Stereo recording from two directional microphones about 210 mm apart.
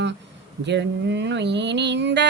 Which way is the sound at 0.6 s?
55° right (ahead or behind).